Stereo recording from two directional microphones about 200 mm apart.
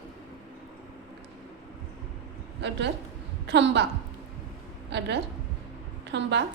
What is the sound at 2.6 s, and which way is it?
A woman's voice, 60° right (ahead or behind).